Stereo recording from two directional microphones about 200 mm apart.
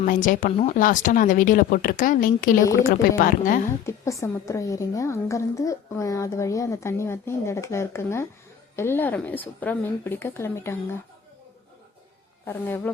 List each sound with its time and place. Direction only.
0.0 s speech: 40° left (ahead or behind)
3.8 s a woman's voice: 15° left (ahead or behind)
12.5 s a woman's voice: 10° left (ahead or behind)